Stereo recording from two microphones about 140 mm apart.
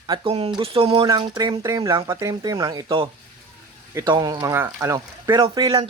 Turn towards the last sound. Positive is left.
turn(degrees=-30)  # may be behind; listen again after turning